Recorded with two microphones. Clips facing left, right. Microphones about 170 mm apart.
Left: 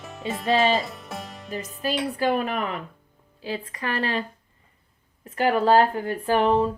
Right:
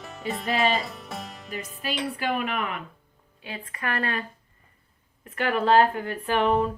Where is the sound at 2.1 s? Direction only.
40° left (ahead or behind).